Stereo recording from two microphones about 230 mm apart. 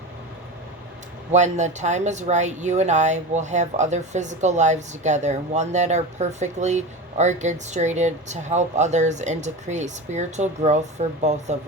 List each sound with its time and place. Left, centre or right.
1.3 s speech: right